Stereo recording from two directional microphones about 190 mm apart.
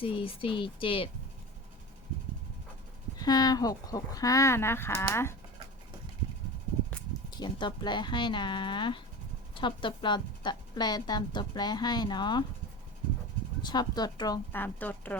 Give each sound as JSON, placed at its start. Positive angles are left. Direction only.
{"t": 0.0, "sound": "a woman's voice", "side_deg": 30}
{"t": 3.2, "sound": "speech", "side_deg": 20}
{"t": 7.3, "sound": "a woman's voice", "side_deg": 25}
{"t": 13.6, "sound": "a woman's voice", "side_deg": 20}